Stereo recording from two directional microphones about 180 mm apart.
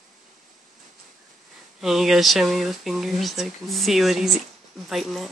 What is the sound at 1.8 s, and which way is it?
Speech, centre (ahead or behind).